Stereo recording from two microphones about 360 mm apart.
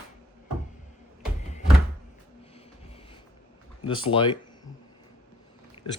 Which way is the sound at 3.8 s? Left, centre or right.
Centre.